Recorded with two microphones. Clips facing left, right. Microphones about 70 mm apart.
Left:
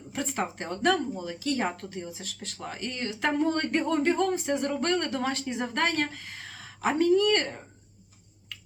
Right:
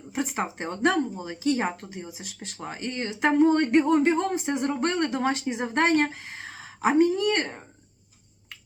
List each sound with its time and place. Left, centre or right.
0.1 s speech: centre